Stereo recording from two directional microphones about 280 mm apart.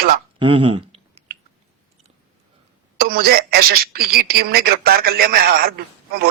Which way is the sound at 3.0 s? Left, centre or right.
Right.